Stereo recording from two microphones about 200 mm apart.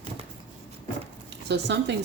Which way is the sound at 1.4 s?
60° right (ahead or behind).